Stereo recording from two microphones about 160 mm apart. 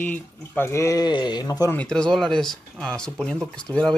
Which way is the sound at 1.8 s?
5° left (ahead or behind).